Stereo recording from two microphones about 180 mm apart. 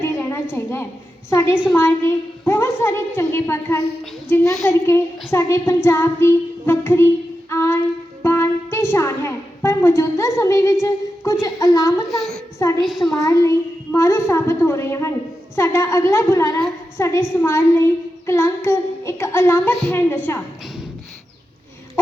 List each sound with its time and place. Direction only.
0.0 s a sound: 10° left (ahead or behind)
1.3 s music: 15° left (ahead or behind)
8.2 s a woman's voice: 15° left (ahead or behind)
12.1 s a child's voice: centre (ahead or behind)
13.1 s music: 20° left (ahead or behind)